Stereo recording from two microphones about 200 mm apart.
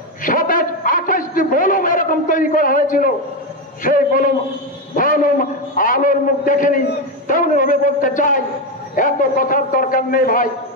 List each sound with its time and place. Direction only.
0.2 s a man's voice: 45° left (ahead or behind)